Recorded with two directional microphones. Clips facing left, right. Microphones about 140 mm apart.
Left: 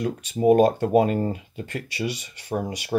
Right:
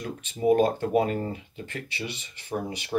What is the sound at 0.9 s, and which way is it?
Speech, 30° left (ahead or behind).